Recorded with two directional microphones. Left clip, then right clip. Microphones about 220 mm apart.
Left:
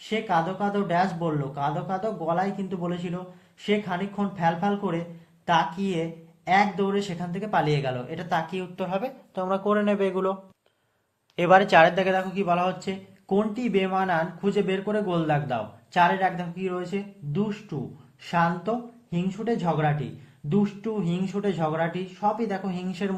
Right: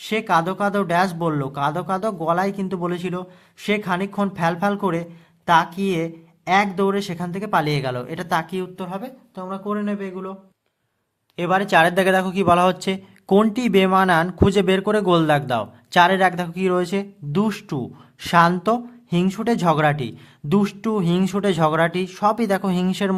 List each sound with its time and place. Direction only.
0.0 s speech: 35° right (ahead or behind); by 10.3 s 5° right (ahead or behind)
11.3 s speech: 20° right (ahead or behind); by 23.1 s 40° right (ahead or behind)